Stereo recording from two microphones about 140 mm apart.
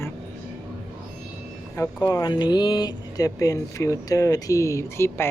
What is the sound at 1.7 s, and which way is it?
Speech, 20° left (ahead or behind).